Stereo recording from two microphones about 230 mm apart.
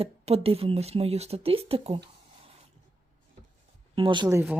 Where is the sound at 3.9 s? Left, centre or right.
Right.